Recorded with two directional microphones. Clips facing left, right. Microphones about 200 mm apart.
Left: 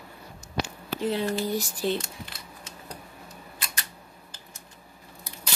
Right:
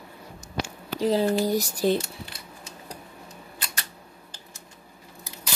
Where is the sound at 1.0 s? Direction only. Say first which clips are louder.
Right 5 dB; 35° right (ahead or behind).